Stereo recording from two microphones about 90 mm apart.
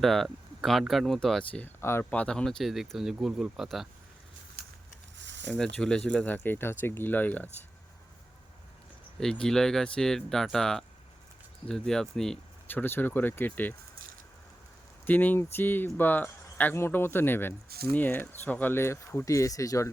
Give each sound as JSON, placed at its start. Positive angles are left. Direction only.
{"t": 0.0, "sound": "speech", "side_deg": 5}
{"t": 1.8, "sound": "speech", "side_deg": 25}
{"t": 2.0, "sound": "speech", "side_deg": 10}
{"t": 5.5, "sound": "speech", "side_deg": 10}
{"t": 9.2, "sound": "speech", "side_deg": 5}
{"t": 12.6, "sound": "speech", "side_deg": 25}
{"t": 15.0, "sound": "speech", "side_deg": 20}